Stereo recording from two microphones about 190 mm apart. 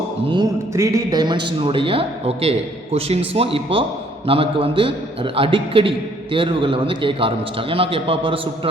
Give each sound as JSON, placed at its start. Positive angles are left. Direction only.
{"t": 0.3, "sound": "a man's voice", "side_deg": -20}